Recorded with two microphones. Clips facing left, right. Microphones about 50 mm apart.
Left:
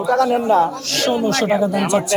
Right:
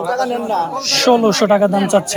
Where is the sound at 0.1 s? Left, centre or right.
Centre.